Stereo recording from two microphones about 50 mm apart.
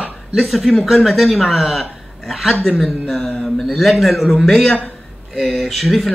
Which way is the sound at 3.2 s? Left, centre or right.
Centre.